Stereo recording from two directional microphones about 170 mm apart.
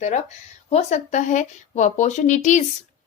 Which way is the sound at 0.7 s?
40° left (ahead or behind).